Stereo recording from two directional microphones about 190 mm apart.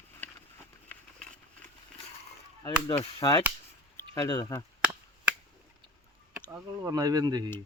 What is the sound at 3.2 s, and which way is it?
Speech, 20° left (ahead or behind).